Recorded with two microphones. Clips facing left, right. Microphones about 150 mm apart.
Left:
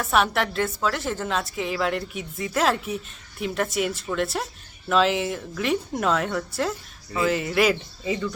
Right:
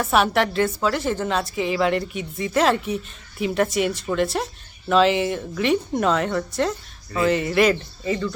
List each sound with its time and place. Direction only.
0.0 s a woman's voice: centre (ahead or behind)